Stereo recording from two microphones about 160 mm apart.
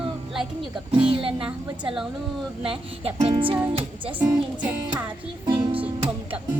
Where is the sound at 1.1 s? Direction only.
35° right (ahead or behind).